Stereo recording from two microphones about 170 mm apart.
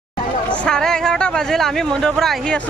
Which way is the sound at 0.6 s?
5° left (ahead or behind).